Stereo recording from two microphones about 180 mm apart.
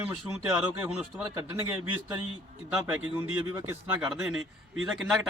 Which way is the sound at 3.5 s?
20° right (ahead or behind).